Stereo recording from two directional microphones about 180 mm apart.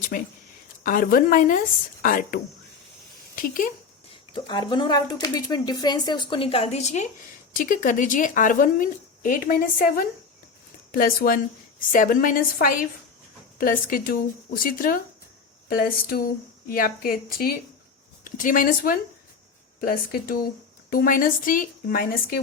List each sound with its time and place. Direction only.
0.1 s a woman's voice: 50° left (ahead or behind)
4.4 s a woman's voice: 25° left (ahead or behind); by 22.4 s 55° left (ahead or behind)